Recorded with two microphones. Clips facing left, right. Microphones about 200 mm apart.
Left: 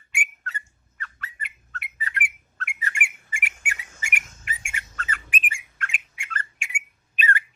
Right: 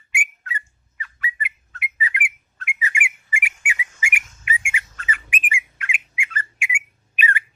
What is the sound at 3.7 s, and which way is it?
Whistle, 10° right (ahead or behind).